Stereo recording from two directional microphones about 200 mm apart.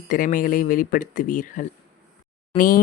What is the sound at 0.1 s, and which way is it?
Speech, 45° left (ahead or behind).